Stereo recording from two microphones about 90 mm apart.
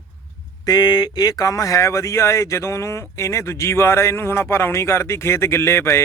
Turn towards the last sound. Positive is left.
turn(degrees=30)  # may be behind; listen again after turning